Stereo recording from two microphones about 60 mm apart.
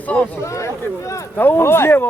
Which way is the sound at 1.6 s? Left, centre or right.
Left.